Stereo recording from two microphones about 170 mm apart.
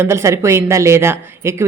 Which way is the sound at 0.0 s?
15° right (ahead or behind).